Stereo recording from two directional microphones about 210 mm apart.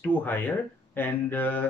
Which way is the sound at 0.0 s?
10° left (ahead or behind).